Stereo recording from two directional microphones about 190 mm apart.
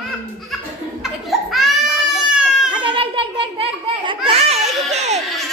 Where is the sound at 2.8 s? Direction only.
25° right (ahead or behind).